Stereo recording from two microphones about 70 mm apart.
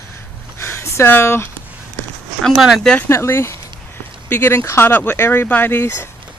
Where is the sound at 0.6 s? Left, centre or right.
Left.